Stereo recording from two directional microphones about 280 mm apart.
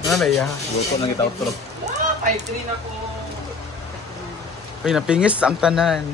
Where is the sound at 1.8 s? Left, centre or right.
Right.